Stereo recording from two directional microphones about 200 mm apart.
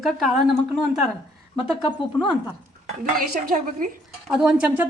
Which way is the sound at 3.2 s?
45° right (ahead or behind).